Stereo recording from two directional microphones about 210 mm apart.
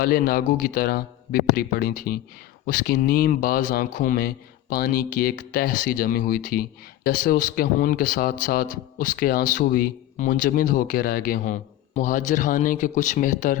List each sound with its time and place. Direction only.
0.0 s a man's voice: 45° left (ahead or behind)